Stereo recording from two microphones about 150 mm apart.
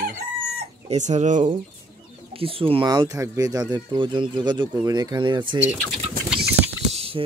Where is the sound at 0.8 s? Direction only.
50° right (ahead or behind).